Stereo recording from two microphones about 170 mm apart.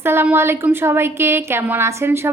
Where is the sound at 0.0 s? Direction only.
15° right (ahead or behind).